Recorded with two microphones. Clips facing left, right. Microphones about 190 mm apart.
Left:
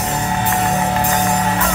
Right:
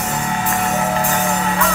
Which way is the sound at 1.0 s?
35° left (ahead or behind).